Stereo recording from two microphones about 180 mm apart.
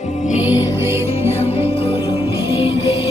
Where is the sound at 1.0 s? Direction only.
35° left (ahead or behind).